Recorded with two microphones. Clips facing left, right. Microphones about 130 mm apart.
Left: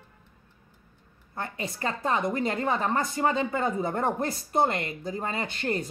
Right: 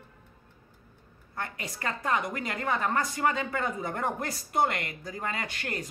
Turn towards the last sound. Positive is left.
turn(degrees=30)  # may be behind; listen again after turning